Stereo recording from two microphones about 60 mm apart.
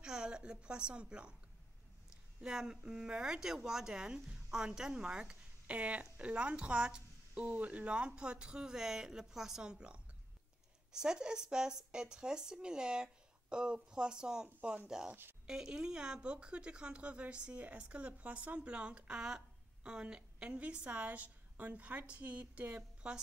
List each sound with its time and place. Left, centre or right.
0.0 s a woman's voice: centre
2.4 s speech: centre